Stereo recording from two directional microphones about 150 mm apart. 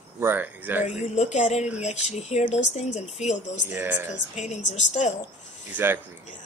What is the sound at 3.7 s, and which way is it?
Speech, 15° right (ahead or behind).